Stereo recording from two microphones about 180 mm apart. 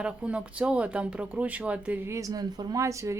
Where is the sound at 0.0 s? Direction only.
5° right (ahead or behind).